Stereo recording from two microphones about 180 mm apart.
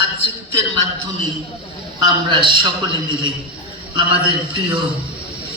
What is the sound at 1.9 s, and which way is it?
A man's voice, 25° right (ahead or behind).